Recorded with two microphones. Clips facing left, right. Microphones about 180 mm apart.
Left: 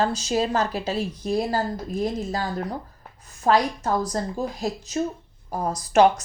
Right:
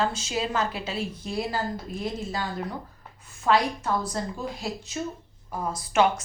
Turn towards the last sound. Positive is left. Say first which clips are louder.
# left 5 dB
turn(degrees=40)  # may be behind; listen again after turning